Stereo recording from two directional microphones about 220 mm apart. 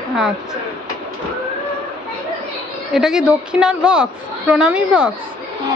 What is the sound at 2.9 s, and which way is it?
A woman's voice, centre (ahead or behind).